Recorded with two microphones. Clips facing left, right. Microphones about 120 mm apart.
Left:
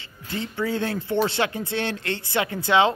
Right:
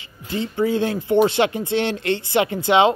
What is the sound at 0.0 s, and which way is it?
Speech, 15° right (ahead or behind).